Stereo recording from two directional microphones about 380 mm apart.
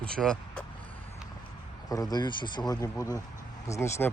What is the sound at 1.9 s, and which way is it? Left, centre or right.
Speech, centre.